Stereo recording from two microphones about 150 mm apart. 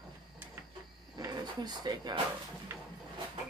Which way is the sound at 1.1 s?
30° right (ahead or behind).